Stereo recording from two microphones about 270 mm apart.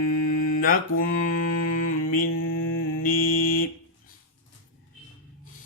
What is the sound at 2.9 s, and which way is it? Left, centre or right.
Mantra, left.